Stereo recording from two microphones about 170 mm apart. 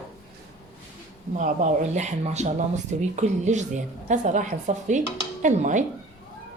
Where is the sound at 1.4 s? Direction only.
45° right (ahead or behind).